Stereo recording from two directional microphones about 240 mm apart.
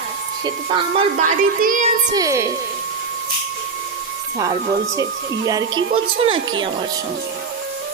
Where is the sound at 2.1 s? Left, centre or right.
Centre.